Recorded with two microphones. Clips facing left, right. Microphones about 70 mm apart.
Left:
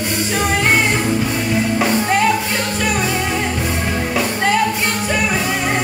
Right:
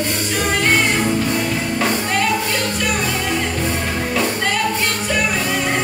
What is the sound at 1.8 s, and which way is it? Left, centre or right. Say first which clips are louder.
Music: left 2 dB; centre.